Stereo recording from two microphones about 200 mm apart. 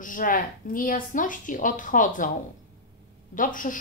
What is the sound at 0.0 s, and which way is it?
Speech, 40° left (ahead or behind).